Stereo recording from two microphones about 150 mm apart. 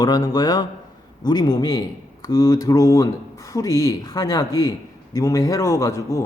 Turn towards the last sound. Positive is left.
turn(degrees=20)  # may be behind; listen again after turning